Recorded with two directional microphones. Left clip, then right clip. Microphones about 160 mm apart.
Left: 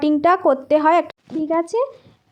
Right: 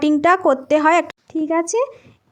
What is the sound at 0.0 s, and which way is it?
Speech, 15° right (ahead or behind).